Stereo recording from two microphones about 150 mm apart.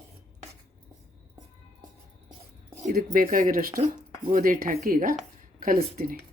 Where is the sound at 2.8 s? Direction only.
65° right (ahead or behind).